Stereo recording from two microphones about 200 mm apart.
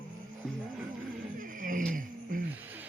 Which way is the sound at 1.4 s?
40° right (ahead or behind).